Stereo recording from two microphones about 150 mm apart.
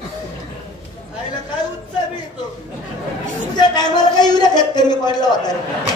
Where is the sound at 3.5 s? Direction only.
30° left (ahead or behind).